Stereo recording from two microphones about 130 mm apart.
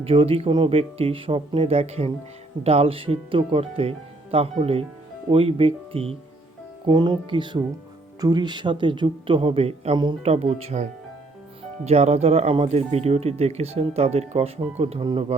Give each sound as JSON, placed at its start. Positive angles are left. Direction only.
{"t": 0.0, "sound": "speech", "side_deg": -50}
{"t": 6.8, "sound": "a man's voice", "side_deg": -35}
{"t": 11.9, "sound": "speech", "side_deg": -55}